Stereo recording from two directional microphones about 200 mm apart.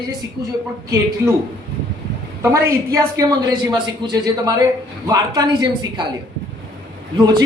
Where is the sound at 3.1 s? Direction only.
15° right (ahead or behind).